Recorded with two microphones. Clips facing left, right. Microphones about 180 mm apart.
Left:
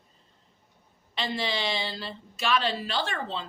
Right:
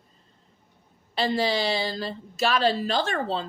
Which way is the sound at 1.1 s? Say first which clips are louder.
Right 6 dB; 40° right (ahead or behind).